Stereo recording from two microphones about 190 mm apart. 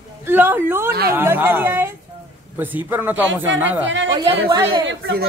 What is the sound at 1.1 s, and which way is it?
Speech, 10° right (ahead or behind).